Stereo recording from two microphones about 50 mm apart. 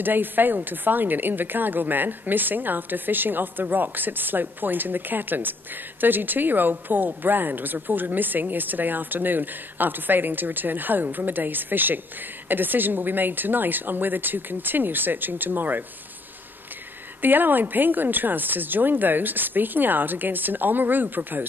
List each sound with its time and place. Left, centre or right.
0.0 s speech: right
17.2 s speech: right